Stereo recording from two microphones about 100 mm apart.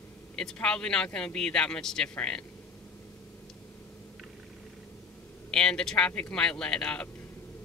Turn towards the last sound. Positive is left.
turn(degrees=10)  # may be behind; listen again after turning